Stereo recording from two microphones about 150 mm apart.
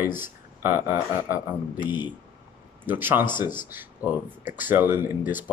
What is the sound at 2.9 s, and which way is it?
Speech, 15° right (ahead or behind).